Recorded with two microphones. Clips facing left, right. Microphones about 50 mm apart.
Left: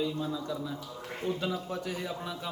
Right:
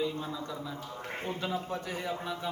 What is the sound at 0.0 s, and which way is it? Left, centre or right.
A man's voice, right.